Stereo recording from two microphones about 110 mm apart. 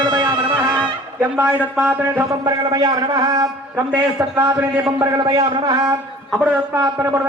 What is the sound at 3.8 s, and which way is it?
Speech, 20° right (ahead or behind).